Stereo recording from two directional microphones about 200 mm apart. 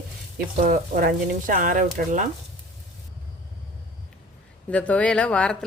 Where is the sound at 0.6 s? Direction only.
45° right (ahead or behind).